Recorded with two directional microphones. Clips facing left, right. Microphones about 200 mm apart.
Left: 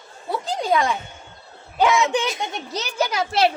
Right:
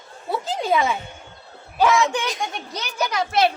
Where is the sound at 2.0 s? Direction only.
20° left (ahead or behind).